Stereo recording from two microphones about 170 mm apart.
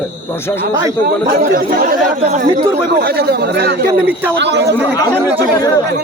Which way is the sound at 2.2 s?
45° right (ahead or behind).